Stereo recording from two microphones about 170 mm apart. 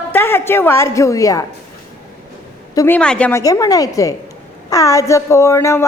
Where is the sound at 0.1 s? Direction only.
15° left (ahead or behind).